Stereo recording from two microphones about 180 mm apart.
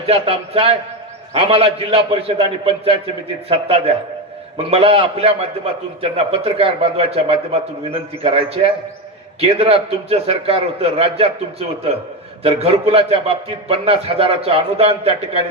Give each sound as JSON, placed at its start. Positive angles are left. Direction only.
{"t": 0.0, "sound": "a man's voice", "side_deg": -35}
{"t": 4.5, "sound": "a man's voice", "side_deg": -35}